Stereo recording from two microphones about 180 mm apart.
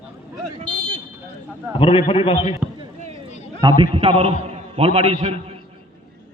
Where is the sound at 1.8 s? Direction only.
30° left (ahead or behind).